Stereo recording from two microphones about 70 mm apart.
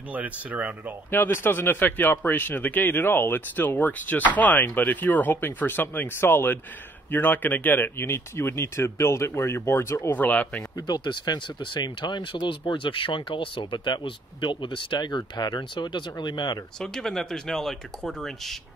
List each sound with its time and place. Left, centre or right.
0.1 s speech: right
1.1 s speech: left
10.1 s speech: left
10.8 s speech: left
14.5 s speech: left
16.8 s speech: centre